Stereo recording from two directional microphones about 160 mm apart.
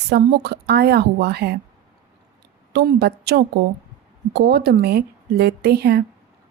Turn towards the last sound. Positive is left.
turn(degrees=-90)